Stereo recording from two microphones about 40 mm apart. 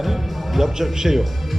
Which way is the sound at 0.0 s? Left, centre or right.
Centre.